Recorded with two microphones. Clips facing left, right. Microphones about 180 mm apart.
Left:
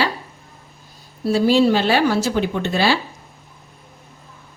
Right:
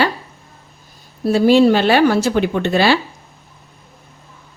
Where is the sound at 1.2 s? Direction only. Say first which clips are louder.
Right 4 dB; 60° right (ahead or behind).